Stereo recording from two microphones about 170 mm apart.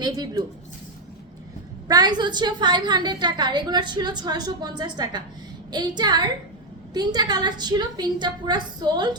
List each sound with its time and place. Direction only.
0.0 s a woman's voice: 25° right (ahead or behind)
1.9 s a woman's voice: 25° right (ahead or behind)